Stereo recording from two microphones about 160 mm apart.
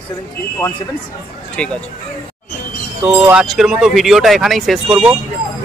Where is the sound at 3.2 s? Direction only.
5° right (ahead or behind).